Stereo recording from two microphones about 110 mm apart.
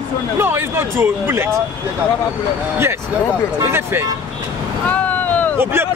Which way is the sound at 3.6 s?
25° right (ahead or behind).